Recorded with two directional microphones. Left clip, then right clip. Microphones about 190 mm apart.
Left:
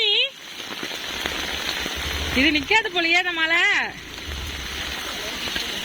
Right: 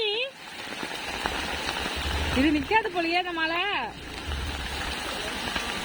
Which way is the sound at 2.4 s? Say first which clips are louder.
Left 5 dB; 10° left (ahead or behind).